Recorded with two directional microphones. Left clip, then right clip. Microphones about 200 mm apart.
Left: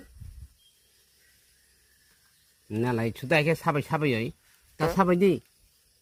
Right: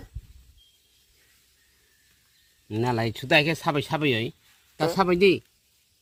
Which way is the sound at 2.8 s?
20° right (ahead or behind).